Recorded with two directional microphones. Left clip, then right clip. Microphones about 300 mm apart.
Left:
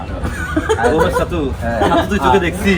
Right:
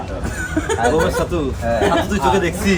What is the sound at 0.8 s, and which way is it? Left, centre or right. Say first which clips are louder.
Speech: left 1 dB; centre.